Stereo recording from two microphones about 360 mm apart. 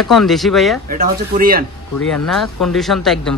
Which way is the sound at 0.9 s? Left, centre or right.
Right.